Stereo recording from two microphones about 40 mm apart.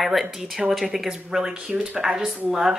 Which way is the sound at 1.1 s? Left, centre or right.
Centre.